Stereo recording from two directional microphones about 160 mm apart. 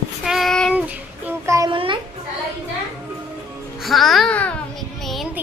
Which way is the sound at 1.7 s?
30° right (ahead or behind).